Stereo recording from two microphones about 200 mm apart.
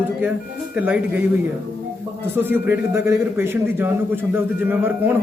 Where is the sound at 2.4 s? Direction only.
10° right (ahead or behind).